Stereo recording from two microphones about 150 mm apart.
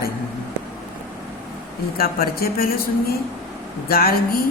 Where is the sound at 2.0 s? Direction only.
85° left.